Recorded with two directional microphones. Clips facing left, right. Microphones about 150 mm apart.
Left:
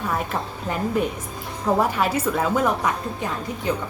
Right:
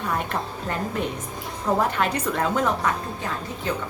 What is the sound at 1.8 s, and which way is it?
A woman's voice, 5° left (ahead or behind).